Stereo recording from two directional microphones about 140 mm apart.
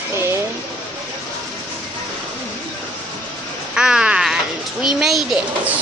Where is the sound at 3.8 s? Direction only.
5° right (ahead or behind).